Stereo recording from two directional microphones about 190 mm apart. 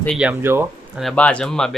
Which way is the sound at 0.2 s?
10° right (ahead or behind).